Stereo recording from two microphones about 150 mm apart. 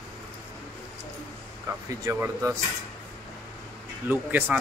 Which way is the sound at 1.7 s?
15° right (ahead or behind).